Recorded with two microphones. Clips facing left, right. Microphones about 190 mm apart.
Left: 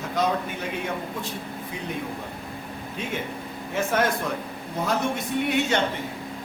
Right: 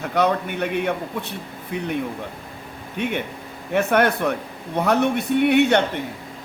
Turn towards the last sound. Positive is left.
turn(degrees=-65)  # may be behind; listen again after turning